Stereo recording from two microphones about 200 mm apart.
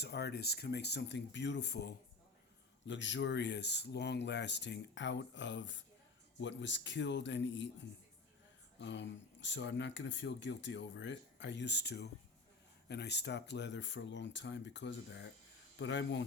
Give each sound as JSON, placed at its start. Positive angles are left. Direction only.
{"t": 0.0, "sound": "speech", "side_deg": 55}